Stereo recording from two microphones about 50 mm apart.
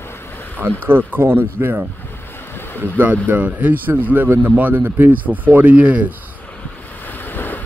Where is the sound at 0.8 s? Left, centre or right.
Right.